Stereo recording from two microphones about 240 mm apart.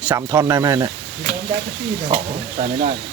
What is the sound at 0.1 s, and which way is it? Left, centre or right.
Speech, centre.